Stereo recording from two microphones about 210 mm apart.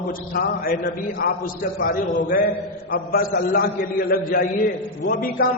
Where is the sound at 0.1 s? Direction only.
45° left (ahead or behind).